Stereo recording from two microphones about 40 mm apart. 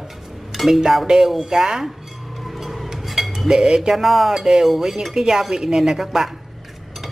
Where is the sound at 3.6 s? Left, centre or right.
Right.